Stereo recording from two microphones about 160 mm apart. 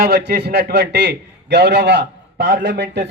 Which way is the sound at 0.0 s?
80° right.